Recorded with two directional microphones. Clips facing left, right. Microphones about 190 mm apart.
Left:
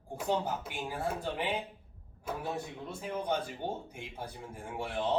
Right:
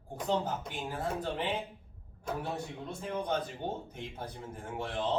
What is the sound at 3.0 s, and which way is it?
A man's voice, 10° left (ahead or behind).